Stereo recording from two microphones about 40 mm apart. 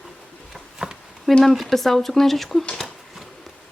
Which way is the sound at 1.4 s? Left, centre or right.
Centre.